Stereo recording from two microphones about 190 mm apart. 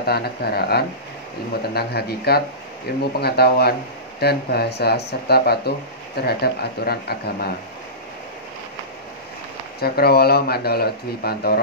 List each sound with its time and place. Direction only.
0.0 s speech: 55° left (ahead or behind)
9.8 s speech: 55° left (ahead or behind)